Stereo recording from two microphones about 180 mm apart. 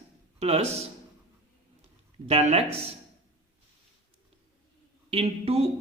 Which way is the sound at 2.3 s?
35° right (ahead or behind).